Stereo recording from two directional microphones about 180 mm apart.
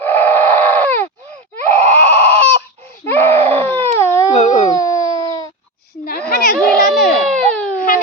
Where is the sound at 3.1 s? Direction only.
10° left (ahead or behind).